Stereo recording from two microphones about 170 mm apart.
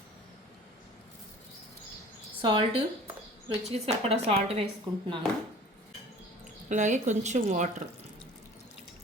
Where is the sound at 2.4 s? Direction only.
25° right (ahead or behind).